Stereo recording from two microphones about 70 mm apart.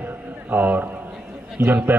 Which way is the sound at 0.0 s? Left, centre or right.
Right.